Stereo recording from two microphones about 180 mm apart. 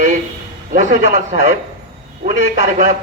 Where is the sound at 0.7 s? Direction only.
50° right (ahead or behind).